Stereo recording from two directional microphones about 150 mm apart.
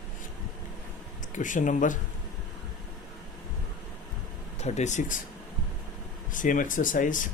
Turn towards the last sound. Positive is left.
turn(degrees=60)  # may be behind; listen again after turning